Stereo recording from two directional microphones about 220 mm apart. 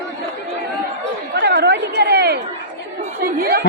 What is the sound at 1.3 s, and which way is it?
Chatter, 50° right (ahead or behind).